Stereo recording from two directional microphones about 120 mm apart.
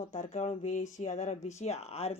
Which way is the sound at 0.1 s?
80° left.